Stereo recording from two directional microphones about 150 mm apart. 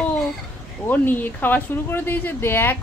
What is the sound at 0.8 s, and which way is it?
Speech, 10° left (ahead or behind).